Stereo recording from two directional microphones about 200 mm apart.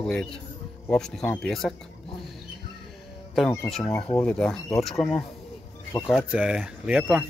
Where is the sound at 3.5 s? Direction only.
5° left (ahead or behind).